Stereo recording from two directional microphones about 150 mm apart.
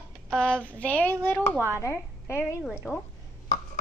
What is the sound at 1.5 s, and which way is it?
Speech, 15° right (ahead or behind).